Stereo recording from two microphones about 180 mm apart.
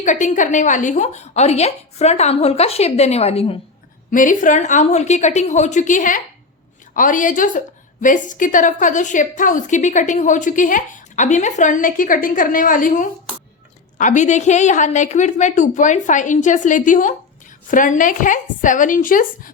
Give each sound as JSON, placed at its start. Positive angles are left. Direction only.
{"t": 0.0, "sound": "a woman's voice", "side_deg": 45}
{"t": 4.1, "sound": "a woman's voice", "side_deg": 45}